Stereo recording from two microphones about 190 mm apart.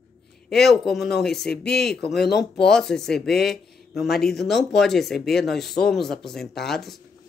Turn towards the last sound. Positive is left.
turn(degrees=0)  # may be behind; listen again after turning